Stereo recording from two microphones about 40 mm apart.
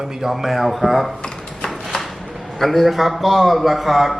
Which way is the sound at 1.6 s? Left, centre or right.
Centre.